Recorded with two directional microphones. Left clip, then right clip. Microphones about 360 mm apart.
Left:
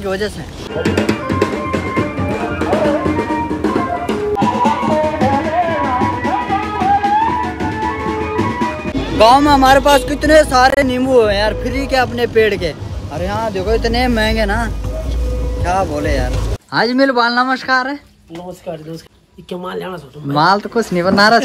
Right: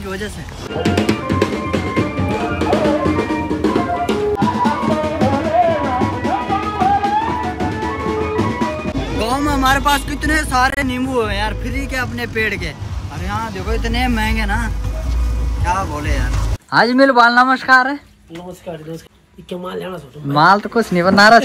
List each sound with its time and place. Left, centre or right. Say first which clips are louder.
0.7 s music: left 1 dB; centre
9.4 s speech: left 6 dB; centre
16.7 s speech: right 2 dB; centre
19.5 s speech: left 2 dB; left
20.3 s speech: right 1 dB; centre